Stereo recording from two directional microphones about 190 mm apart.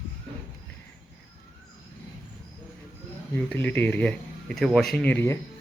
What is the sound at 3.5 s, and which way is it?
Speech, 10° left (ahead or behind).